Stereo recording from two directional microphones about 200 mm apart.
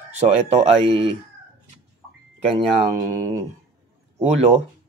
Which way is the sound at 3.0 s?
40° right (ahead or behind).